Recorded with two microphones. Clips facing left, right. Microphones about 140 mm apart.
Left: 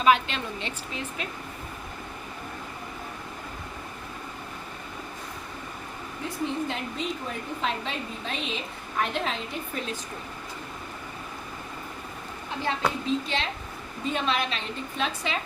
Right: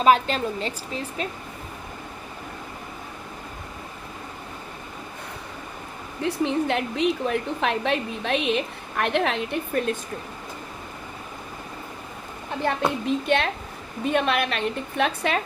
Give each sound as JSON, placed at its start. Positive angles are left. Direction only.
{"t": 0.0, "sound": "a woman's voice", "side_deg": -40}
{"t": 6.2, "sound": "a woman's voice", "side_deg": -70}
{"t": 13.1, "sound": "a woman's voice", "side_deg": -60}